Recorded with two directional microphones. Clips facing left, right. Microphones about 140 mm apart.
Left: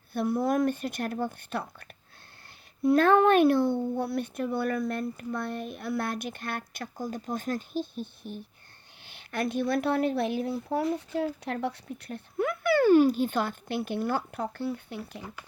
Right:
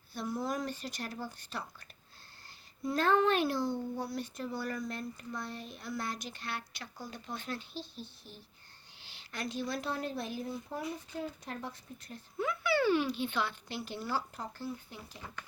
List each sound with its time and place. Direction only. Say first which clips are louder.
0.1 s a woman's voice: left 9 dB; 55° left (ahead or behind)